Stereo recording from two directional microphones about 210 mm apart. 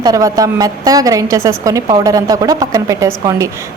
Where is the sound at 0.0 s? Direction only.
15° right (ahead or behind).